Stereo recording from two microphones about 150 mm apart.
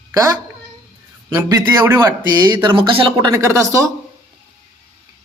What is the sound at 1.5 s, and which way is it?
Speech, 20° right (ahead or behind).